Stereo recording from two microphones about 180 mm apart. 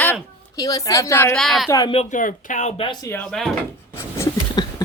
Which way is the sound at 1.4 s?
Centre (ahead or behind).